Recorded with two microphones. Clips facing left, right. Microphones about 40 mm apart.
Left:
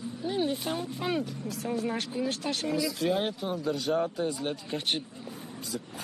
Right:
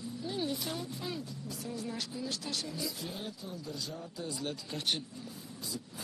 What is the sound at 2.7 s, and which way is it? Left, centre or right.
Speech, left.